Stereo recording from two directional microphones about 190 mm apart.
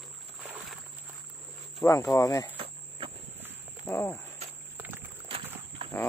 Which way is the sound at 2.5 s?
30° right (ahead or behind).